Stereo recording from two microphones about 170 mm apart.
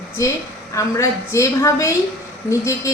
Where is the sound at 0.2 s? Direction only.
20° left (ahead or behind).